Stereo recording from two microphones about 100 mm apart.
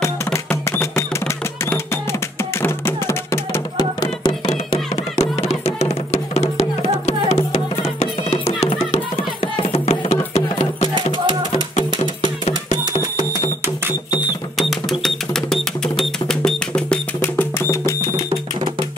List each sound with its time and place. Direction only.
0.5 s music: 25° left (ahead or behind)
2.6 s music: 25° left (ahead or behind)
4.0 s music: 50° left (ahead or behind); by 10.9 s 90° left
14.6 s music: centre (ahead or behind)
17.2 s music: 20° left (ahead or behind)